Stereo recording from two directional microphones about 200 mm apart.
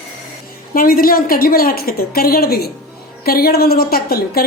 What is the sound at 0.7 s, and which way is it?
A woman's voice, 45° left (ahead or behind).